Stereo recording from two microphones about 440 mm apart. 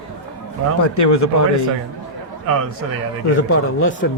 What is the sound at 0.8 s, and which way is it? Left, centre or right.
Speech, left.